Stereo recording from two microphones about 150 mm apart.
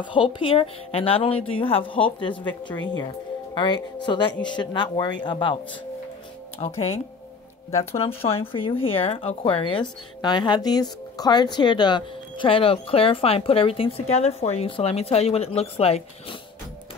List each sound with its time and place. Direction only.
0.0 s speech: 35° left (ahead or behind)
7.9 s speech: 40° left (ahead or behind)